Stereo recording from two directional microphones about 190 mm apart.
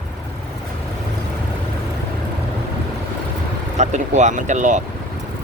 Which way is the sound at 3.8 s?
40° right (ahead or behind).